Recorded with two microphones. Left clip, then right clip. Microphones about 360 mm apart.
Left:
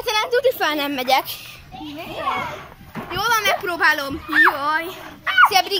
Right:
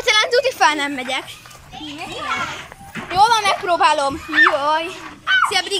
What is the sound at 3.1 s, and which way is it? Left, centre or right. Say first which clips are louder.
Speech: right 5 dB; centre.